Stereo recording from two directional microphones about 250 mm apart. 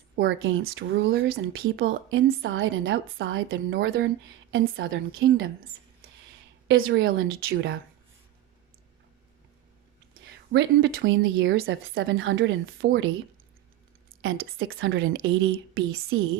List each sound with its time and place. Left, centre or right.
0.2 s speech: right
6.7 s speech: right
10.2 s speech: right
14.6 s speech: right